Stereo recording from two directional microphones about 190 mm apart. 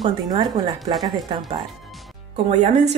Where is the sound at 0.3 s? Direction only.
20° right (ahead or behind).